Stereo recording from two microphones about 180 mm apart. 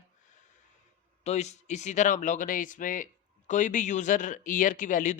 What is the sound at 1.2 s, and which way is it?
Speech, 40° left (ahead or behind).